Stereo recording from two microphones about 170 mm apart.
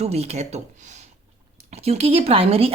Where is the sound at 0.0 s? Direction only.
40° right (ahead or behind).